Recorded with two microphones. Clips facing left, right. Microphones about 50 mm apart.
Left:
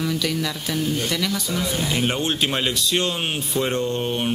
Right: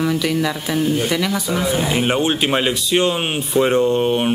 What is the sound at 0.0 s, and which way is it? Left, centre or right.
A man's voice, centre.